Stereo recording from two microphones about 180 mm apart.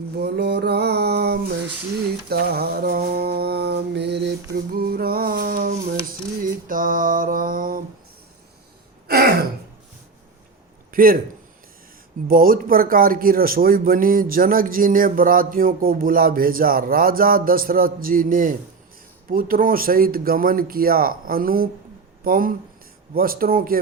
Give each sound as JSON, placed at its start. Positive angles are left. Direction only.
{"t": 0.2, "sound": "a sound", "side_deg": -65}
{"t": 2.3, "sound": "mantra", "side_deg": -60}
{"t": 4.5, "sound": "a sound", "side_deg": -60}
{"t": 9.0, "sound": "throat clearing", "side_deg": -55}
{"t": 10.9, "sound": "a man's voice", "side_deg": -55}
{"t": 12.3, "sound": "speech", "side_deg": -55}